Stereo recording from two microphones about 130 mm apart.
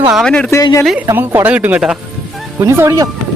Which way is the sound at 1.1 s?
20° right (ahead or behind).